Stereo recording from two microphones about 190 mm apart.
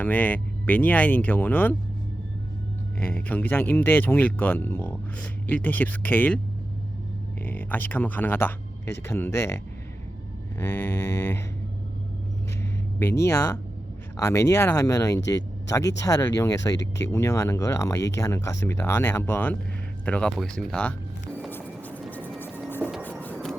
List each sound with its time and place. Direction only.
0.0 s speech: 10° left (ahead or behind)
3.0 s speech: 10° left (ahead or behind)
7.4 s speech: 10° left (ahead or behind)
10.6 s speech: 10° left (ahead or behind)
13.2 s speech: 15° left (ahead or behind)
21.5 s music: 10° left (ahead or behind)
22.8 s music: 5° right (ahead or behind)